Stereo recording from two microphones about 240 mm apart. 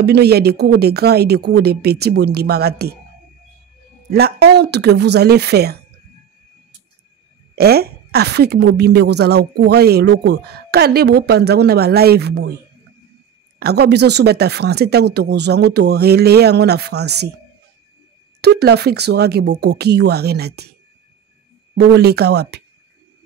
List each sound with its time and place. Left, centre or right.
0.0 s a woman's voice: right
4.1 s a woman's voice: right
7.5 s a woman's voice: right
13.6 s a woman's voice: right
18.4 s a woman's voice: right
21.7 s a woman's voice: right